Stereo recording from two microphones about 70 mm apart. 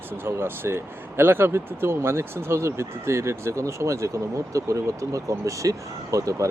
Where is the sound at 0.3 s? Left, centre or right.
Right.